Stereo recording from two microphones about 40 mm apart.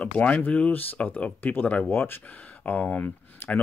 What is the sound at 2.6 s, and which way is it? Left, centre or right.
Speech, left.